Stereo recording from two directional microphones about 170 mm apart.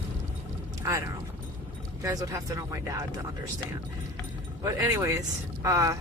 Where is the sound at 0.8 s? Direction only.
20° right (ahead or behind).